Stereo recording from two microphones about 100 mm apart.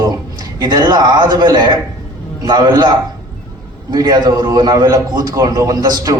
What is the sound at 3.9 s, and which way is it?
A man's voice, 40° right (ahead or behind).